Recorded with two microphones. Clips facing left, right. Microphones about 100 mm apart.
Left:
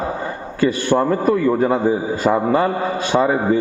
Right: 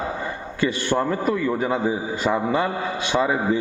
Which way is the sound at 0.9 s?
15° left (ahead or behind).